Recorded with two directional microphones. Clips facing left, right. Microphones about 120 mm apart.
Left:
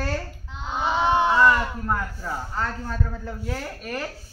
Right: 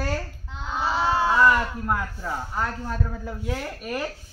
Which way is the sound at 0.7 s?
20° left (ahead or behind).